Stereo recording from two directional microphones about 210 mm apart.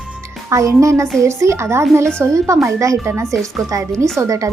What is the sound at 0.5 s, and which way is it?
A woman's voice, 15° right (ahead or behind).